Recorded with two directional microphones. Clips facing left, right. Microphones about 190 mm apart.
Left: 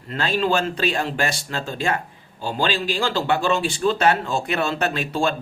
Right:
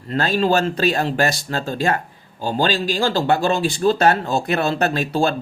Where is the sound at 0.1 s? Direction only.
40° right (ahead or behind).